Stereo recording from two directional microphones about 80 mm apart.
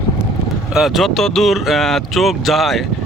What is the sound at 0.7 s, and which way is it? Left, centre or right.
Speech, centre.